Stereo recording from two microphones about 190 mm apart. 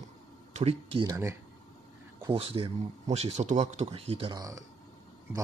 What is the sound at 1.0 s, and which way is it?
Speech, 15° right (ahead or behind).